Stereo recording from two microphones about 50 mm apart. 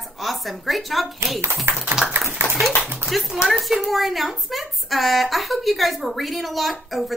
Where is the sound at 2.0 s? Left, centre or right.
Centre.